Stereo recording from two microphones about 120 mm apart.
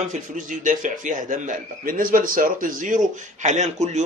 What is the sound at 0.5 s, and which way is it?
A man's voice, 90° right.